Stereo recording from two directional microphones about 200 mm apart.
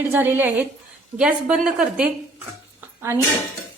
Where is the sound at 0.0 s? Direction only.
10° right (ahead or behind).